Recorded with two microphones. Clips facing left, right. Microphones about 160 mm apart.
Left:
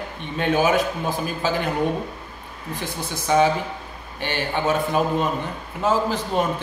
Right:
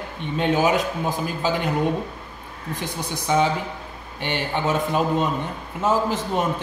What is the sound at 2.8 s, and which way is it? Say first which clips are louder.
A man's voice: even; 20° right (ahead or behind).